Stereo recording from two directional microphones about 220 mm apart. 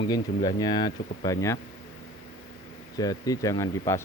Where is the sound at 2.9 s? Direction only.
15° left (ahead or behind).